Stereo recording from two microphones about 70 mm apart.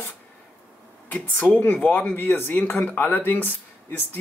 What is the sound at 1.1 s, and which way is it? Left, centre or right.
Speech, left.